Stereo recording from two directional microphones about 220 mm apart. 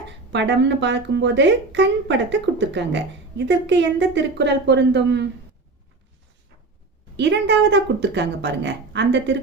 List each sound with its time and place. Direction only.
0.3 s speech: 55° right (ahead or behind)
7.2 s speech: 55° right (ahead or behind)